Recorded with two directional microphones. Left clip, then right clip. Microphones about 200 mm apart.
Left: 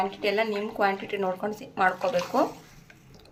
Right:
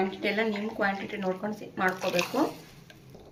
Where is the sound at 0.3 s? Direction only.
45° left (ahead or behind).